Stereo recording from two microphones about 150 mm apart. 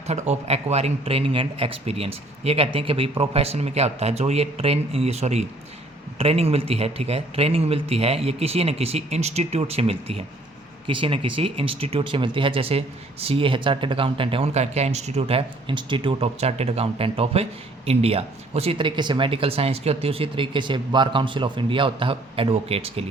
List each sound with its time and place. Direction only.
0.1 s a man's voice: 45° right (ahead or behind)